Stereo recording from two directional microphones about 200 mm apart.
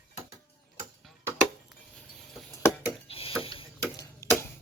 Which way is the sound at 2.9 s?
30° left (ahead or behind).